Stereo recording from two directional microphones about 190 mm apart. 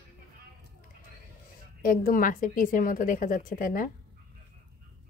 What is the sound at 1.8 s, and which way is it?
A woman's voice, 50° left (ahead or behind).